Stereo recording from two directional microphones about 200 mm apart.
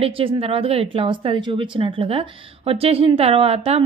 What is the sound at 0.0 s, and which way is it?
Speech, 25° right (ahead or behind).